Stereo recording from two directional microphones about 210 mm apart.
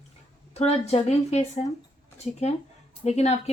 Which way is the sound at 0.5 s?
30° left (ahead or behind).